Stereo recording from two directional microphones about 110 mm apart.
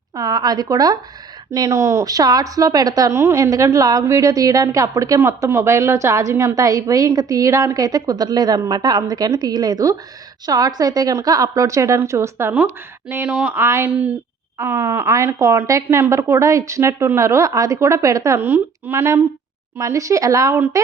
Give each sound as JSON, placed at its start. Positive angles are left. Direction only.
{"t": 0.2, "sound": "a woman's voice", "side_deg": -35}